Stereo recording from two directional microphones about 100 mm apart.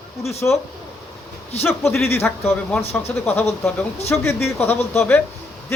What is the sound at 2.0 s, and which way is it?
A man's voice, 25° left (ahead or behind).